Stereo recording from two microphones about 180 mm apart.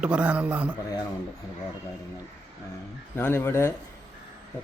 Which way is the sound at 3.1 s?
10° left (ahead or behind).